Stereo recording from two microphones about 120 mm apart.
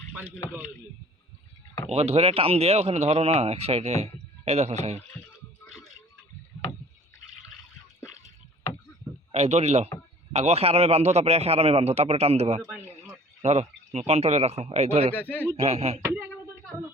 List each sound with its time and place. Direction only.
1.9 s a man's voice: 60° right (ahead or behind)
5.6 s a sound: centre (ahead or behind)
9.3 s a man's voice: 60° right (ahead or behind)
15.1 s speech: 15° left (ahead or behind)
15.6 s a man's voice: 60° right (ahead or behind)
16.0 s a sound: 20° right (ahead or behind)